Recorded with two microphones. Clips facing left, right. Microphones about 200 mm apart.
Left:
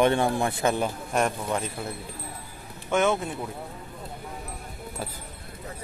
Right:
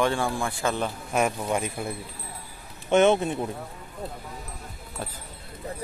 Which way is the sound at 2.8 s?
25° right (ahead or behind).